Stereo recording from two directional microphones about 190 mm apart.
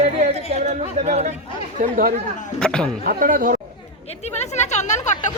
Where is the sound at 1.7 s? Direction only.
45° right (ahead or behind).